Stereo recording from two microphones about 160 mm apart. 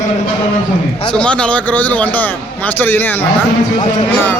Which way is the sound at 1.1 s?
5° left (ahead or behind).